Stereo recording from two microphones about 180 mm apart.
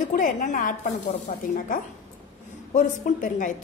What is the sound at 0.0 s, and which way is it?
Speech, 45° left (ahead or behind).